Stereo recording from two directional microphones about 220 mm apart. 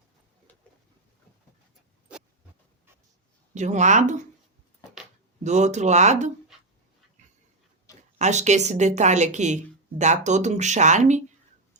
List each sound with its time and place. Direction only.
3.5 s a woman's voice: 30° right (ahead or behind)
5.4 s a woman's voice: 30° right (ahead or behind)
8.2 s a woman's voice: 30° right (ahead or behind)